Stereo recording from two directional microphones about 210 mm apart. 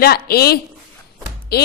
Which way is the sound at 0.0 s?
45° left (ahead or behind).